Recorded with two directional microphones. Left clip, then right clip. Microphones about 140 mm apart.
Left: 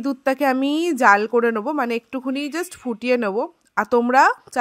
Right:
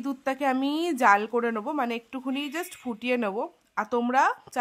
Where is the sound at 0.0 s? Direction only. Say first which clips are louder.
Left 7 dB; 35° left (ahead or behind).